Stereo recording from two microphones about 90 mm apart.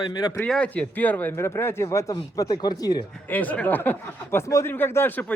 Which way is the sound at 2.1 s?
45° left (ahead or behind).